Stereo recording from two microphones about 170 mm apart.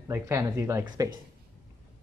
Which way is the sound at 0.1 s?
15° right (ahead or behind).